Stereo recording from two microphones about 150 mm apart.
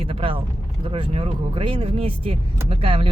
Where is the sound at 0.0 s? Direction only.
35° right (ahead or behind).